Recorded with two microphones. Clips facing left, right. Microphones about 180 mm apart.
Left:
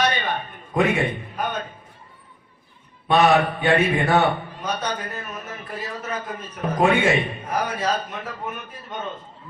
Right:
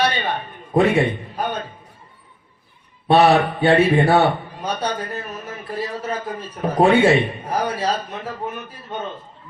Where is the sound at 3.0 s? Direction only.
30° right (ahead or behind).